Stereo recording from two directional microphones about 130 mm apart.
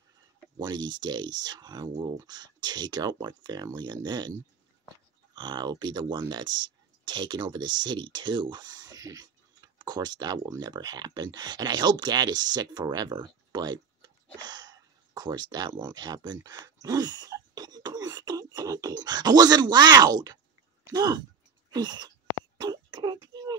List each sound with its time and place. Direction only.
0.6 s speech: 35° right (ahead or behind)
5.3 s speech: 35° right (ahead or behind)
22.6 s a sound: 35° right (ahead or behind)